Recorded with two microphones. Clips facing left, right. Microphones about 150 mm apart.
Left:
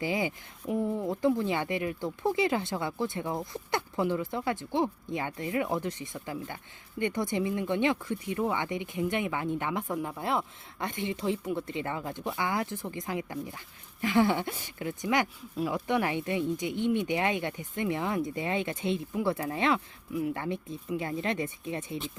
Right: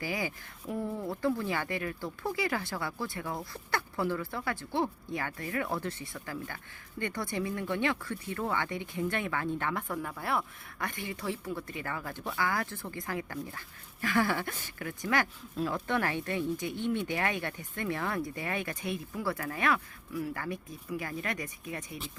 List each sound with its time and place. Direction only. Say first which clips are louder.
0.0 s speech: left 5 dB; 20° left (ahead or behind)